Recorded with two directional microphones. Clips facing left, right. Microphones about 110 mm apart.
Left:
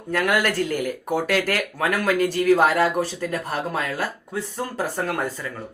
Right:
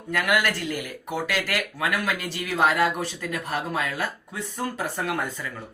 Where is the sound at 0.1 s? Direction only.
35° left (ahead or behind).